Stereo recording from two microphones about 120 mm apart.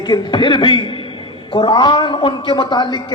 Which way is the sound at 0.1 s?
40° left (ahead or behind).